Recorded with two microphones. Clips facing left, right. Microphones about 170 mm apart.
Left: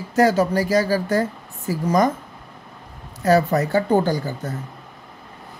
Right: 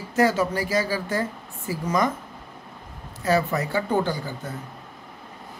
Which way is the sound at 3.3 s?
40° left (ahead or behind).